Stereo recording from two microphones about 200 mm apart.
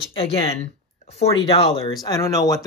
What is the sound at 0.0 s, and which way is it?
Speech, 25° left (ahead or behind).